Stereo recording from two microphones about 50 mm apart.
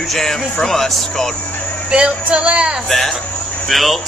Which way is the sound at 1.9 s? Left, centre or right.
Centre.